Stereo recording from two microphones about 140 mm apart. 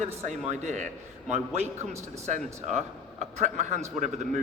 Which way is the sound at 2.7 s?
55° right (ahead or behind).